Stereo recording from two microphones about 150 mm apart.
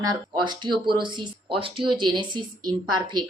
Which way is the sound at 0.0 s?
30° right (ahead or behind).